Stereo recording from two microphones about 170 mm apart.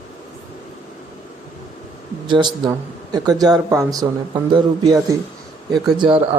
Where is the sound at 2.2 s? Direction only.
25° right (ahead or behind).